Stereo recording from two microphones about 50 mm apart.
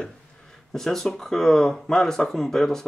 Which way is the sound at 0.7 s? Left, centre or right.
Centre.